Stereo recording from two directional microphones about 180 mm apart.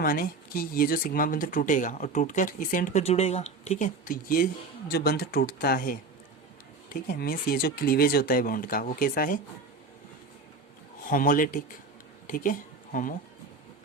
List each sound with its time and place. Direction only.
0.0 s speech: 50° left (ahead or behind)
7.1 s speech: 50° left (ahead or behind)
11.0 s speech: 50° left (ahead or behind)